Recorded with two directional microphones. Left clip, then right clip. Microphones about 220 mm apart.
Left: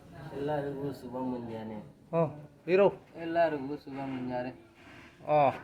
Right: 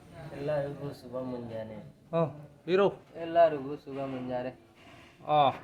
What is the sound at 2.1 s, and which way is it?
A man's voice, 10° right (ahead or behind).